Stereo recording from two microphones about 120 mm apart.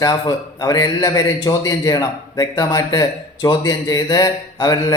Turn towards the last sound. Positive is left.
turn(degrees=35)  # may be behind; listen again after turning